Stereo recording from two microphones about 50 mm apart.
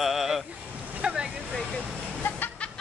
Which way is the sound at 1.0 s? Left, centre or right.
Centre.